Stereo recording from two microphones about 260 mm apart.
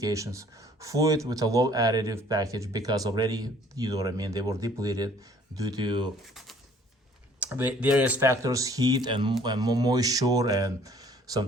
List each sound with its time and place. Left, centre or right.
0.0 s speech: centre
6.2 s speech: centre